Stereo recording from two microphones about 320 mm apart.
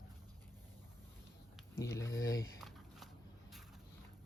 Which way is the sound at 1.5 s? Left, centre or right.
Centre.